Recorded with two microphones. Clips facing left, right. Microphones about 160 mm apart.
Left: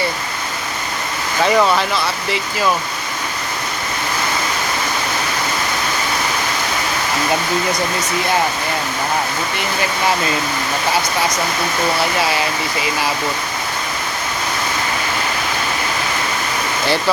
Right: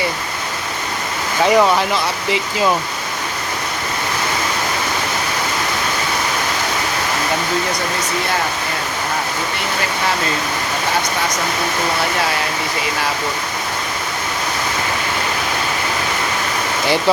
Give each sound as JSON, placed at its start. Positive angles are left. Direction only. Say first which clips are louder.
{"t": 1.5, "sound": "speech", "louder": "right 2 dB", "side_deg": -15}